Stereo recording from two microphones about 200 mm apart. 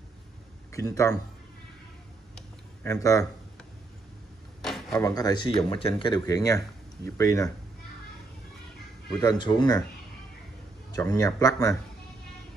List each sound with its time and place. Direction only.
0.7 s speech: 15° left (ahead or behind)
2.3 s a sound: 15° left (ahead or behind)
4.6 s a sound: centre (ahead or behind)
4.9 s speech: 15° left (ahead or behind)
9.2 s speech: 20° left (ahead or behind)
11.0 s speech: 15° left (ahead or behind)